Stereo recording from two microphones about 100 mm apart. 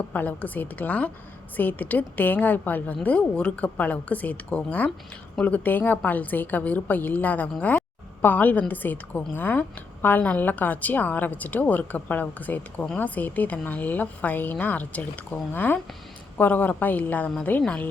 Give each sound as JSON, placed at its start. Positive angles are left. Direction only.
{"t": 0.0, "sound": "a woman's voice", "side_deg": 15}